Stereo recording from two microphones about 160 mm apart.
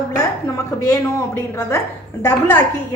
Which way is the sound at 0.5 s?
20° left (ahead or behind).